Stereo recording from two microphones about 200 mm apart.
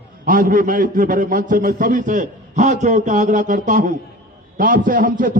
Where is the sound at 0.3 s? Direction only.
45° right (ahead or behind).